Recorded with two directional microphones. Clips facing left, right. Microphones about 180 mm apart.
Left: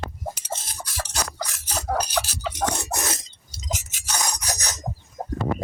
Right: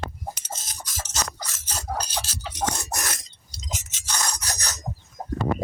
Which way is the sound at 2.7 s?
20° left (ahead or behind).